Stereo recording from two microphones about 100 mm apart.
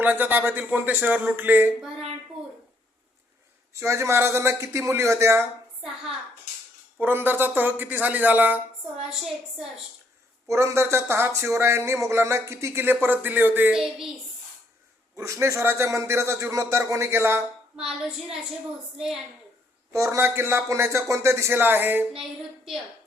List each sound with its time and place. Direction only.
0.0 s speech: 15° right (ahead or behind)
3.8 s speech: 30° right (ahead or behind)
7.0 s speech: 20° right (ahead or behind)
9.0 s a woman's voice: 5° right (ahead or behind)
10.5 s speech: 25° right (ahead or behind)
15.1 s speech: 30° right (ahead or behind)
17.7 s speech: 5° right (ahead or behind)
19.9 s speech: 30° right (ahead or behind)
22.1 s child singing: 5° right (ahead or behind)